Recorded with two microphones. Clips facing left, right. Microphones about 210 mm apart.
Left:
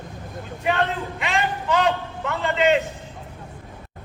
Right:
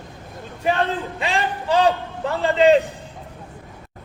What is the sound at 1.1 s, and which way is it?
A man's voice, 30° right (ahead or behind).